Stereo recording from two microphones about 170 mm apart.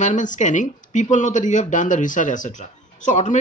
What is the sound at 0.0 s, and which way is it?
Speech, 45° left (ahead or behind).